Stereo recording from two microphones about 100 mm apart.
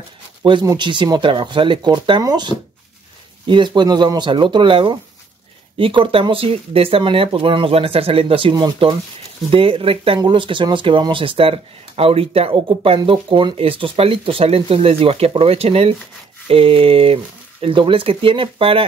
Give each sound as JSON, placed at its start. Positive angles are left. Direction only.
{"t": 0.4, "sound": "speech", "side_deg": -50}
{"t": 9.5, "sound": "speech", "side_deg": -65}
{"t": 16.4, "sound": "speech", "side_deg": -70}